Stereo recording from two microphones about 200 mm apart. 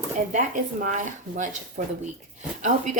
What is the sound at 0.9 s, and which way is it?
Speech, 40° right (ahead or behind).